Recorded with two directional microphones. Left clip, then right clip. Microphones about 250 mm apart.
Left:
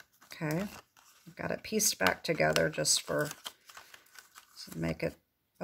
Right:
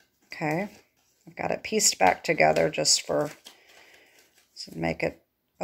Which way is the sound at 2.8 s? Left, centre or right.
Left.